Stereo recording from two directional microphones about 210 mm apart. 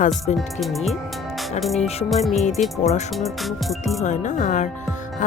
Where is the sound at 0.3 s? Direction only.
Centre (ahead or behind).